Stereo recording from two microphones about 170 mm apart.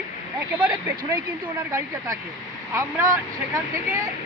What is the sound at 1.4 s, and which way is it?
Speech, 20° right (ahead or behind).